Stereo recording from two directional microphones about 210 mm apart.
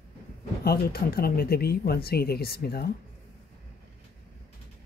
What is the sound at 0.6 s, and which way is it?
Speech, 50° left (ahead or behind).